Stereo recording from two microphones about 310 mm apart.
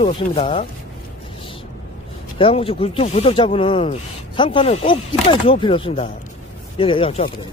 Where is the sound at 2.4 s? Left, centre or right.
Centre.